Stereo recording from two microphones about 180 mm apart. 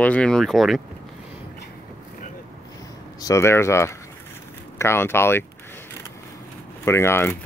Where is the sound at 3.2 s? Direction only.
15° left (ahead or behind).